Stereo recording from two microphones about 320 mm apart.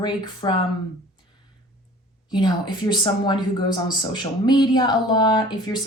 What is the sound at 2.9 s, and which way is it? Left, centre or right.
Speech, centre.